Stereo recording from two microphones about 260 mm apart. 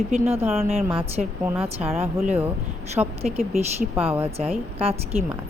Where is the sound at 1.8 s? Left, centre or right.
Centre.